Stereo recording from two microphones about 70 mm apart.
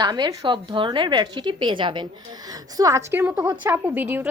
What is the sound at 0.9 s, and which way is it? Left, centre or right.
Speech, right.